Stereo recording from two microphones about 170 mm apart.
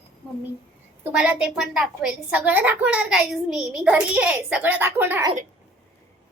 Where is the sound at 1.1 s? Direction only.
5° right (ahead or behind).